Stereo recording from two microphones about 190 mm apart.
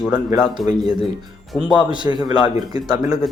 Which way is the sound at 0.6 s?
Centre (ahead or behind).